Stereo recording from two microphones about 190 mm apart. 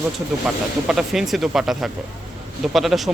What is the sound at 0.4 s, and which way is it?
Speech, 5° right (ahead or behind).